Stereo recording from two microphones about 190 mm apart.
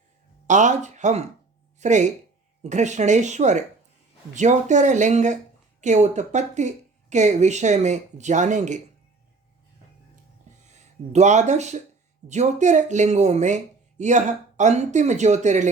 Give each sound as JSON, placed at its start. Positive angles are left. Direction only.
{"t": 0.4, "sound": "speech", "side_deg": -40}
{"t": 10.6, "sound": "speech", "side_deg": -35}